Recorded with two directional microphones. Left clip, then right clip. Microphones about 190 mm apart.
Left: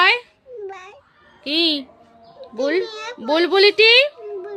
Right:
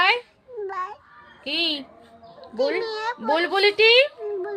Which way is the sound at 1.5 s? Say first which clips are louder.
Left 5 dB; 55° left (ahead or behind).